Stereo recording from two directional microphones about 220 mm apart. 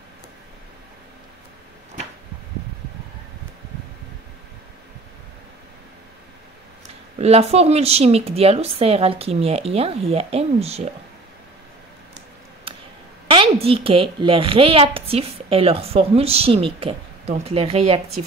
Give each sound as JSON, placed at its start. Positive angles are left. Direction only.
{"t": 7.2, "sound": "a woman's voice", "side_deg": -30}
{"t": 12.7, "sound": "a sound", "side_deg": -25}
{"t": 13.3, "sound": "a woman's voice", "side_deg": -25}